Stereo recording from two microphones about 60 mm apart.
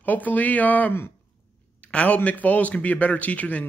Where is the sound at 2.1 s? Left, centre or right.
Left.